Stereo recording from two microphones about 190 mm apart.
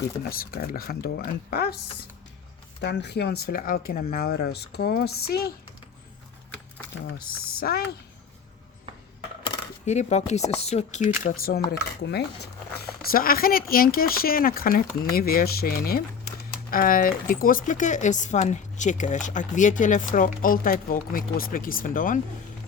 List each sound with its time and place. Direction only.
0.3 s speech: 50° left (ahead or behind)
7.2 s speech: 50° left (ahead or behind)
9.8 s speech: 35° left (ahead or behind)
11.2 s speech: 45° left (ahead or behind)
11.8 s speech: 60° left (ahead or behind)
13.0 s speech: 50° left (ahead or behind)